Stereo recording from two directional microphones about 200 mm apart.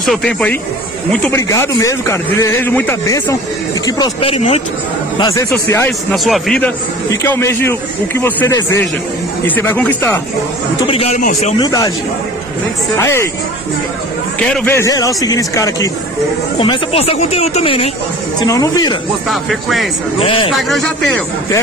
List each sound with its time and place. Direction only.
0.0 s a man's voice: centre (ahead or behind)
3.8 s speech: 25° left (ahead or behind)
5.2 s a man's voice: 15° left (ahead or behind)
5.9 s speech: centre (ahead or behind)
7.2 s a man's voice: 10° left (ahead or behind)
10.9 s speech: 30° left (ahead or behind)
11.6 s a man's voice: 15° left (ahead or behind)
12.9 s a man's voice: 15° left (ahead or behind)
14.4 s a man's voice: 10° left (ahead or behind)
16.5 s speech: 30° left (ahead or behind)
18.4 s speech: 20° left (ahead or behind)
19.2 s speech: centre (ahead or behind)
20.2 s speech: 25° left (ahead or behind)
20.5 s speech: centre (ahead or behind)